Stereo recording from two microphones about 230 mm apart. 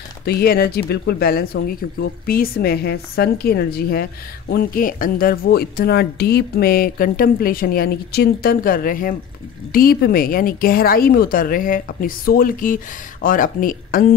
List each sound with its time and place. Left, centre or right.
0.2 s speech: left